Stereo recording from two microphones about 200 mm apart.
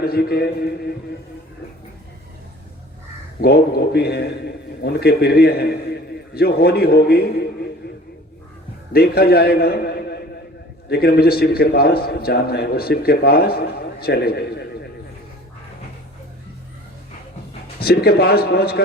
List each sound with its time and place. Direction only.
0.0 s a man's voice: 50° left (ahead or behind)
3.4 s a man's voice: 55° left (ahead or behind)
8.9 s a man's voice: 50° left (ahead or behind)
17.7 s a man's voice: 50° left (ahead or behind)